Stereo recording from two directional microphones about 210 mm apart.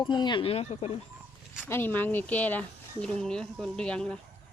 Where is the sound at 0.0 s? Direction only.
20° left (ahead or behind).